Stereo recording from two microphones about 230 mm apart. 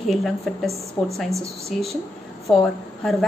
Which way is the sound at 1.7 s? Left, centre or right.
Centre.